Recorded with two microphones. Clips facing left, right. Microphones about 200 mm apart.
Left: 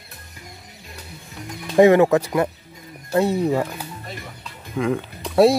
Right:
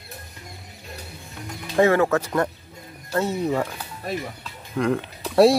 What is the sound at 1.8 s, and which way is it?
Speech, 15° left (ahead or behind).